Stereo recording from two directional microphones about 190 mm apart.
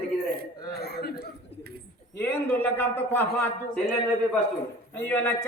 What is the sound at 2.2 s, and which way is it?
A woman's voice, 10° left (ahead or behind).